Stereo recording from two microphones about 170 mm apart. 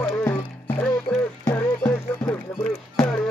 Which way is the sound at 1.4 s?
15° left (ahead or behind).